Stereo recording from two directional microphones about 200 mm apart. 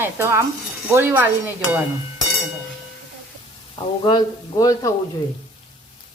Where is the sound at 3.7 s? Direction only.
20° left (ahead or behind).